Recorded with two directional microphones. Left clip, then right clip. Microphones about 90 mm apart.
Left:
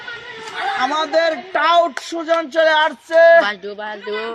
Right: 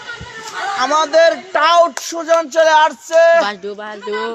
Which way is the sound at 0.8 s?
25° right (ahead or behind).